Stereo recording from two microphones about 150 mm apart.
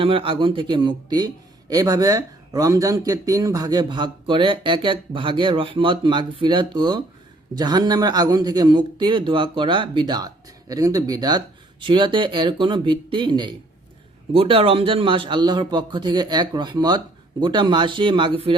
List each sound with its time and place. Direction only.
0.0 s speech: 35° right (ahead or behind)